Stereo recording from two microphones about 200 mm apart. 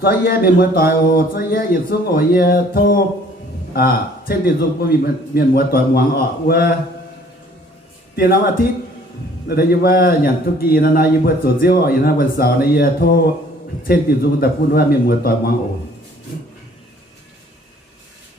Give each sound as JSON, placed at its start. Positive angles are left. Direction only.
{"t": 0.0, "sound": "a man's voice", "side_deg": 50}
{"t": 8.1, "sound": "a man's voice", "side_deg": 50}